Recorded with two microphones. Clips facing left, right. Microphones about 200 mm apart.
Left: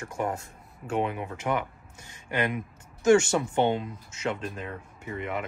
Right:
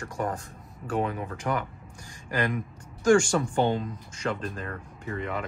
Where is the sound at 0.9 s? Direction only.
10° left (ahead or behind).